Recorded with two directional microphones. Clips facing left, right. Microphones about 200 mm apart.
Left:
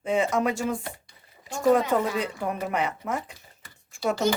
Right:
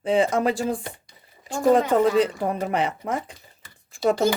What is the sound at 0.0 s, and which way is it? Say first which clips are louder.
Speech: right 4 dB; 30° right (ahead or behind).